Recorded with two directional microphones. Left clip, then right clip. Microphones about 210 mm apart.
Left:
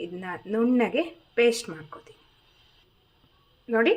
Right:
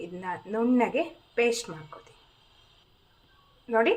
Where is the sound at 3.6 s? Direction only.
20° left (ahead or behind).